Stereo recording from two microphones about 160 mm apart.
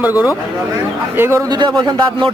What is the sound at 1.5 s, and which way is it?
Speech, 25° right (ahead or behind).